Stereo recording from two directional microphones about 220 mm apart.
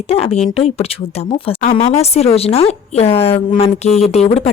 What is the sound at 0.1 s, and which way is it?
A woman's voice, 30° left (ahead or behind).